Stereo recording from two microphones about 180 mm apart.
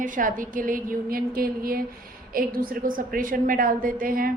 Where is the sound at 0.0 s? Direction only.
50° right (ahead or behind).